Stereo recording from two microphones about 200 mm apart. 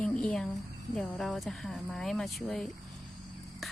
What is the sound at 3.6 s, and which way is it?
Cricket, centre (ahead or behind).